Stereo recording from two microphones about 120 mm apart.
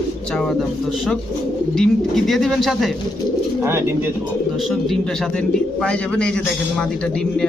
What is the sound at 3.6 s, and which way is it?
Speech, 20° right (ahead or behind).